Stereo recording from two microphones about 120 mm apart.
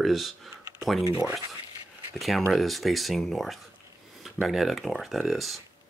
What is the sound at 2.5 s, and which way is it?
Speech, centre (ahead or behind).